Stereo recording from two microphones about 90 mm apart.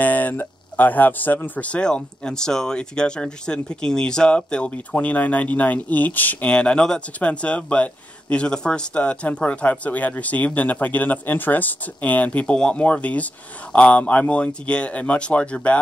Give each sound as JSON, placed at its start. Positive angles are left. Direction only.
{"t": 0.0, "sound": "speech", "side_deg": 20}